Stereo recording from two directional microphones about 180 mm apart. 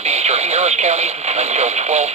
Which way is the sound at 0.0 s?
35° right (ahead or behind).